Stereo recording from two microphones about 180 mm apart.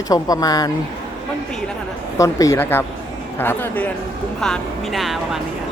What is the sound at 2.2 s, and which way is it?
Speech, 20° left (ahead or behind).